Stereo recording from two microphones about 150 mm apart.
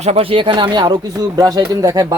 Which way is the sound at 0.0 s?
40° right (ahead or behind).